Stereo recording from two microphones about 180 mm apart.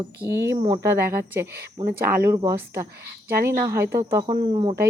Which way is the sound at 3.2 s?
55° right (ahead or behind).